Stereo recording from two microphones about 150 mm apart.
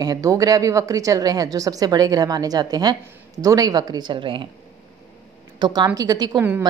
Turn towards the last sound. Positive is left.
turn(degrees=-25)  # may be behind; listen again after turning